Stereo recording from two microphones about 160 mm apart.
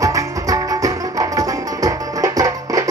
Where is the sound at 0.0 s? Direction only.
20° right (ahead or behind).